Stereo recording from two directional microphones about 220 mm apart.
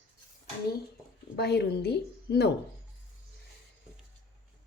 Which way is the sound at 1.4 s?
50° left (ahead or behind).